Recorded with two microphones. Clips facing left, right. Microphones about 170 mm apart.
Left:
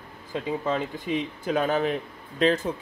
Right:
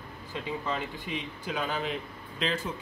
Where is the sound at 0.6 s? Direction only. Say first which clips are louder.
Left 6 dB; 45° left (ahead or behind).